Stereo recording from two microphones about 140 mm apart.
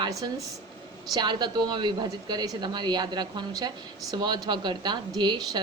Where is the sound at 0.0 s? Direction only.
25° right (ahead or behind).